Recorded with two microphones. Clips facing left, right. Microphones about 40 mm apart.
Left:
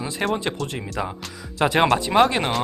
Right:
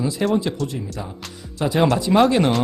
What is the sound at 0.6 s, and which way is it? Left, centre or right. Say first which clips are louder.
Speech: even; left.